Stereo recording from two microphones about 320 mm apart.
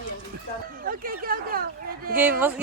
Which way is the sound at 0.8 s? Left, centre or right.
Right.